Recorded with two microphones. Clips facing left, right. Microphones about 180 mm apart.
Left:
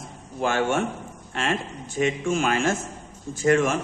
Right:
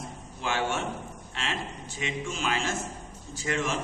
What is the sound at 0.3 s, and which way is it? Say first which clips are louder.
A man's voice: left 7 dB; 50° left (ahead or behind).